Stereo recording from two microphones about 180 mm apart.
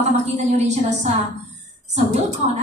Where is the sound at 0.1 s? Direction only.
40° right (ahead or behind).